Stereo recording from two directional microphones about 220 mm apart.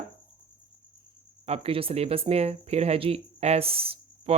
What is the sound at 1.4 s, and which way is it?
Speech, 25° right (ahead or behind).